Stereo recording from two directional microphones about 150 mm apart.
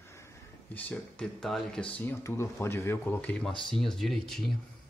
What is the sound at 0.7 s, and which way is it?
Speech, 5° left (ahead or behind).